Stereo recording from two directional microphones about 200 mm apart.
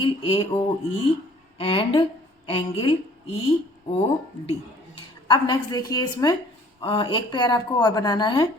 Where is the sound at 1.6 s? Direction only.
25° left (ahead or behind).